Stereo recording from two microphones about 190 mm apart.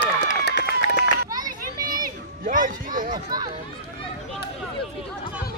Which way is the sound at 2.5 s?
45° right (ahead or behind).